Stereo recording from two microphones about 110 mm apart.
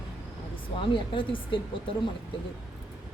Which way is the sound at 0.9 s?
50° left (ahead or behind).